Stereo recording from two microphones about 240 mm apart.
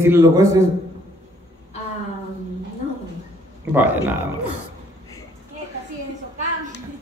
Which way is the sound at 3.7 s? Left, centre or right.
Centre.